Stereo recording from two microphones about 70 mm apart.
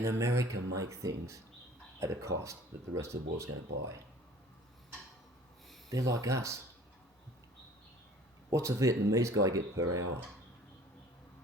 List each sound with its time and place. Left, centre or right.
0.0 s speech: right
5.9 s speech: right
8.4 s speech: right